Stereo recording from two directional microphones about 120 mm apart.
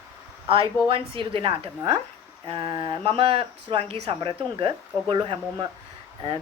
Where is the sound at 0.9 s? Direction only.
45° right (ahead or behind).